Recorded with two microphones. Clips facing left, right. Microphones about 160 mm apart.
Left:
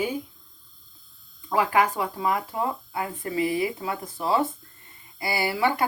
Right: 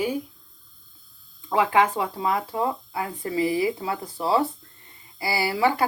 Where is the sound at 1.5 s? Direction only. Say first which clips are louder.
Right 2 dB; 25° right (ahead or behind).